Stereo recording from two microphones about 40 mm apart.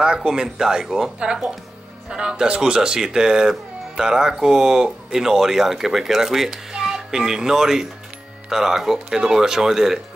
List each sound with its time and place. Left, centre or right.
0.0 s speech: right